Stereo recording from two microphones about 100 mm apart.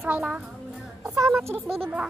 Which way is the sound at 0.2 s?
5° right (ahead or behind).